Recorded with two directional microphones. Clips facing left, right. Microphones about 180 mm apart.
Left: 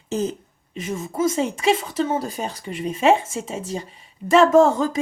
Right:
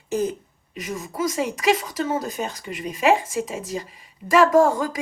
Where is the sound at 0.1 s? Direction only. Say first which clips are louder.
Even; 25° left (ahead or behind).